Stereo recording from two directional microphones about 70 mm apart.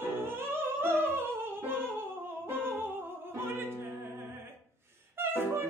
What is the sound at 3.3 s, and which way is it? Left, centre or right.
Opera, right.